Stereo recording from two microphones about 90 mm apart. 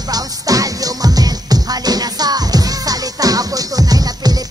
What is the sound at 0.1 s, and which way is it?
Music, 40° right (ahead or behind).